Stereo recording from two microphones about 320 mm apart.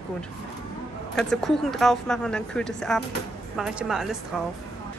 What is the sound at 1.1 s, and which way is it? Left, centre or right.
Speech, centre.